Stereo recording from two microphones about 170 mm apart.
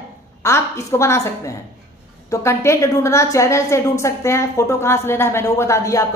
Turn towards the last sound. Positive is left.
turn(degrees=20)  # may be behind; listen again after turning